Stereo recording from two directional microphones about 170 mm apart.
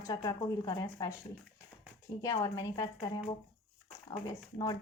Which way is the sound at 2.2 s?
20° left (ahead or behind).